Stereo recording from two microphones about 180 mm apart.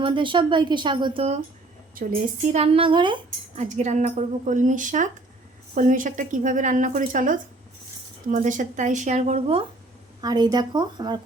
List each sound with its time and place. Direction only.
0.0 s speech: 25° right (ahead or behind)
2.0 s a woman's voice: 50° right (ahead or behind)
2.5 s speech: 35° right (ahead or behind)
3.2 s a woman's voice: 40° right (ahead or behind)
10.2 s speech: 25° right (ahead or behind)